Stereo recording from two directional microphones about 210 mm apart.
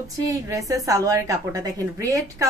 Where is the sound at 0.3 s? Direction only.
15° right (ahead or behind).